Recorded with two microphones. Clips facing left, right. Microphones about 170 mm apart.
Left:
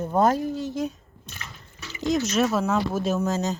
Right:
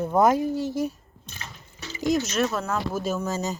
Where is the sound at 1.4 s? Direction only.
35° right (ahead or behind).